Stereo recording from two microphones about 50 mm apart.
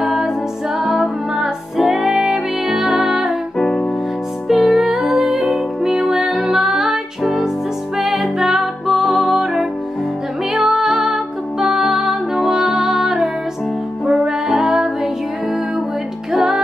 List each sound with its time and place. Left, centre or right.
0.0 s music: centre
3.5 s music: centre
4.5 s music: centre
16.3 s music: centre